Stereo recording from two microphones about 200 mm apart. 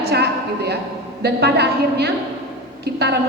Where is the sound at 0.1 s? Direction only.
55° right (ahead or behind).